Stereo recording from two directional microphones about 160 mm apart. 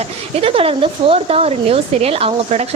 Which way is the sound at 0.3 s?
35° right (ahead or behind).